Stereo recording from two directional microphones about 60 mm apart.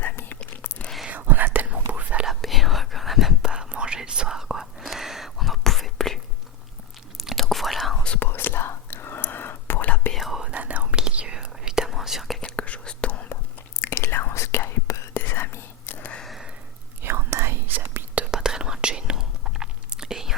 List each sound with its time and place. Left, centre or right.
0.0 s whispering: left
1.1 s whispering: right
2.4 s whispering: centre
3.5 s whispering: centre
7.2 s whispering: centre
8.2 s whispering: left
10.2 s whispering: centre
10.5 s whispering: right; by 12.4 s centre
12.4 s whispering: centre
13.8 s whispering: left
16.2 s sniff: centre
17.0 s whispering: right
18.1 s whispering: right
18.3 s whispering: centre